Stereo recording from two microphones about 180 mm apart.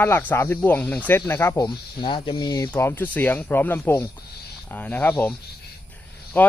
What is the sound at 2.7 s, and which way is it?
Speech, 10° left (ahead or behind).